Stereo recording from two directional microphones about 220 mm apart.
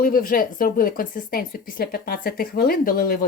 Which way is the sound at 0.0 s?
40° left (ahead or behind).